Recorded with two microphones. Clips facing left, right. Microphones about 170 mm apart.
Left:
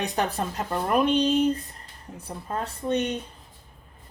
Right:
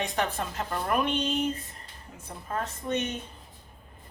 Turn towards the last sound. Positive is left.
turn(degrees=35)  # may be behind; listen again after turning